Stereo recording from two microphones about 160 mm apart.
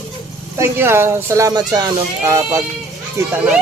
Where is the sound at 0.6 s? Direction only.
15° right (ahead or behind).